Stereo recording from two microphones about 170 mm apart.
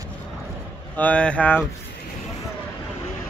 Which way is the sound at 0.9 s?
10° left (ahead or behind).